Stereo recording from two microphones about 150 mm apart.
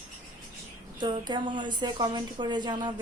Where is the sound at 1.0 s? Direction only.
30° right (ahead or behind).